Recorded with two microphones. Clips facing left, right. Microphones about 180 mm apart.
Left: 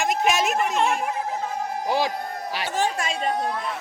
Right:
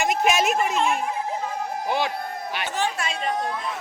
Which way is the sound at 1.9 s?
35° left (ahead or behind).